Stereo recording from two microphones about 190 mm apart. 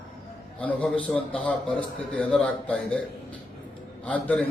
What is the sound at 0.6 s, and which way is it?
A man's voice, 5° left (ahead or behind).